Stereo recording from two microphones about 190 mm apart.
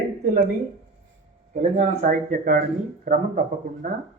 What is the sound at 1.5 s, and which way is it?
Speech, 40° right (ahead or behind).